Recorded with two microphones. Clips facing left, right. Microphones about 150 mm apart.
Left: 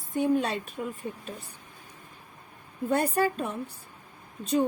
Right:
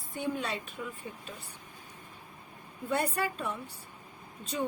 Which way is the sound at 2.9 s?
40° left (ahead or behind).